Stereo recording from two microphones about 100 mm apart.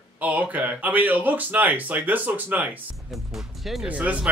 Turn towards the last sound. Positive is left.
turn(degrees=-10)  # may be behind; listen again after turning